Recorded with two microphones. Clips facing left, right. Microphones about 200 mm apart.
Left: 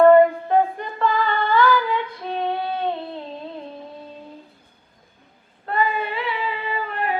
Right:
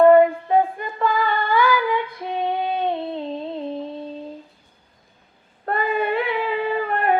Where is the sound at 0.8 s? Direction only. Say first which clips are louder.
Even; 10° right (ahead or behind).